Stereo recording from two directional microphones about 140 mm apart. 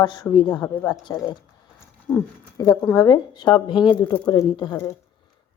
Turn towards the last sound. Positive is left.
turn(degrees=30)  # may be behind; listen again after turning